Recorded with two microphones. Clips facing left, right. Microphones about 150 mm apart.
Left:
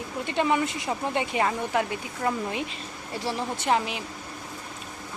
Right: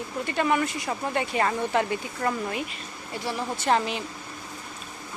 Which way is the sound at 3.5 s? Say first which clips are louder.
Right 2 dB; 15° left (ahead or behind).